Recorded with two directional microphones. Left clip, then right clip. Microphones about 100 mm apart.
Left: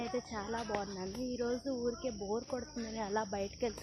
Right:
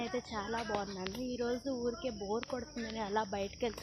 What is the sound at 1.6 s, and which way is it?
Speech, 10° right (ahead or behind).